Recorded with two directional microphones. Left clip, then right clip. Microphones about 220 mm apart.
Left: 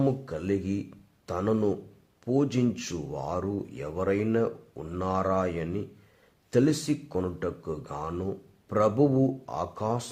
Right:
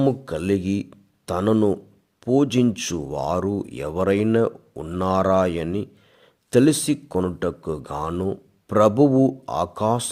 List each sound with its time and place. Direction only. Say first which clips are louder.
0.0 s speech: right 7 dB; 40° right (ahead or behind)